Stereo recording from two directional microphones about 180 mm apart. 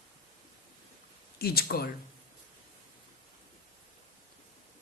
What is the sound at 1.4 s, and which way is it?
Speech, 60° left (ahead or behind).